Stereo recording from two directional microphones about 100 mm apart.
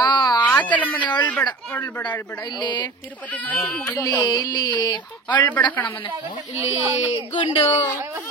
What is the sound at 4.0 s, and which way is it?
Speech, 35° left (ahead or behind).